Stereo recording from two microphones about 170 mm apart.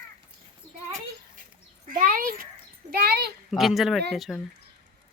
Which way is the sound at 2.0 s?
55° right (ahead or behind).